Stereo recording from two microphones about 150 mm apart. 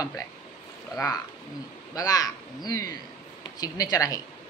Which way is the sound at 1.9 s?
25° left (ahead or behind).